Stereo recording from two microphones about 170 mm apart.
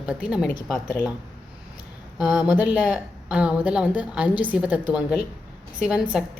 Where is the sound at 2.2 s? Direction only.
5° right (ahead or behind).